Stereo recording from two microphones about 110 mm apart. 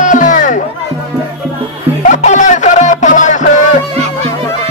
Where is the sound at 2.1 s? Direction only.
90° left.